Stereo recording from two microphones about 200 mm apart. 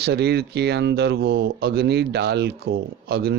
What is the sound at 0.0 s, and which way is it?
Speech, 55° right (ahead or behind).